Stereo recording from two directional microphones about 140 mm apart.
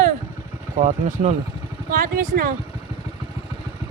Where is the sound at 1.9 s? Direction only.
90° right.